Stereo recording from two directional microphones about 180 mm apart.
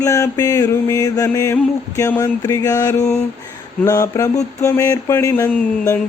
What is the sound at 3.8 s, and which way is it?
Mantra, 15° left (ahead or behind).